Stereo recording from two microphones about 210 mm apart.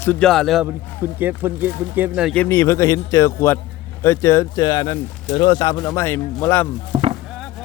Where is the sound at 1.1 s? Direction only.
10° right (ahead or behind).